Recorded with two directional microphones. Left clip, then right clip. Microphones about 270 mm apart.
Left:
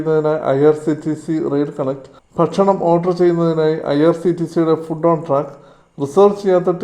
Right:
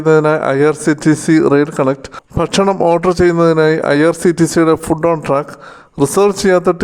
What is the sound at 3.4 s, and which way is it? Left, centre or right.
A man's voice, right.